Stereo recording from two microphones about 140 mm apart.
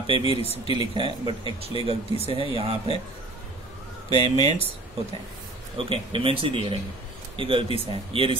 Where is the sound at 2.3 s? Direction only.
40° right (ahead or behind).